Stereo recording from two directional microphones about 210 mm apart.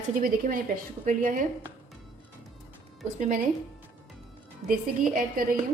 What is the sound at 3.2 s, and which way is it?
Speech, 35° right (ahead or behind).